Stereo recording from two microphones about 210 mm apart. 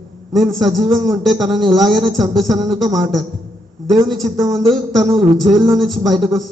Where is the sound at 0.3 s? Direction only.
Centre (ahead or behind).